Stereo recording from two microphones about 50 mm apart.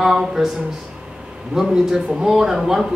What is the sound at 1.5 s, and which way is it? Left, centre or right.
Speech, centre.